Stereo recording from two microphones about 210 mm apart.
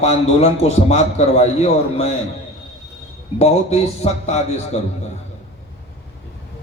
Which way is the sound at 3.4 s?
30° left (ahead or behind).